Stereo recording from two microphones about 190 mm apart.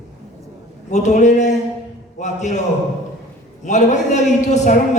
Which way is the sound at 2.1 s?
40° left (ahead or behind).